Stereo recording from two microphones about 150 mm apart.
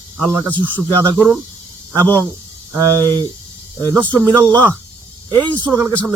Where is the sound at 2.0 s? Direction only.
10° left (ahead or behind).